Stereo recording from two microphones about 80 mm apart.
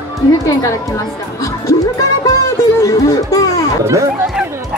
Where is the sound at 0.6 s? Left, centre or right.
Left.